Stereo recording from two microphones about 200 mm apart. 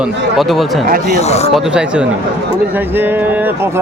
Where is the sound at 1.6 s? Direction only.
5° right (ahead or behind).